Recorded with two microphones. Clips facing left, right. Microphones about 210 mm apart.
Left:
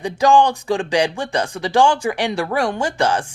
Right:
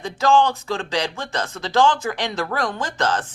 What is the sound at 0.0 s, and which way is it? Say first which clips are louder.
Speech: left 3 dB; 15° left (ahead or behind).